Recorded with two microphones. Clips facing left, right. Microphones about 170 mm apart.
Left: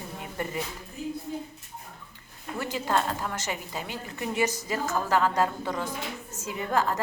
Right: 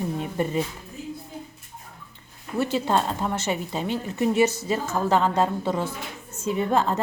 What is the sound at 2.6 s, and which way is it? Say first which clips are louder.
A woman's voice: right 4 dB; 25° right (ahead or behind).